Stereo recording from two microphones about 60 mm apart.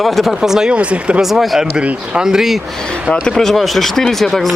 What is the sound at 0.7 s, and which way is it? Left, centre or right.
Speech, centre.